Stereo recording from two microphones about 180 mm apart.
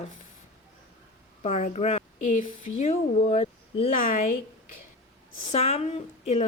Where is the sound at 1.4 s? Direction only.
40° left (ahead or behind).